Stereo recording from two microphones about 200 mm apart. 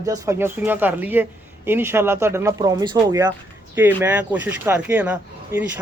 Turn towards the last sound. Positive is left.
turn(degrees=-5)  # may be behind; listen again after turning